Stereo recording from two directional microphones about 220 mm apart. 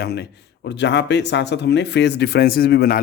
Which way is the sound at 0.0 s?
50° left (ahead or behind).